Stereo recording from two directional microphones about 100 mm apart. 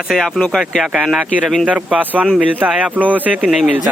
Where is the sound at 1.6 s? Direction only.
15° right (ahead or behind).